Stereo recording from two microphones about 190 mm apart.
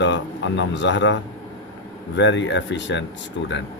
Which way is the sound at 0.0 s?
70° left (ahead or behind).